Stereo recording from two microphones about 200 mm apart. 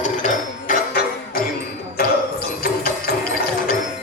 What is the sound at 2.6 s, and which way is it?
Music, 45° left (ahead or behind).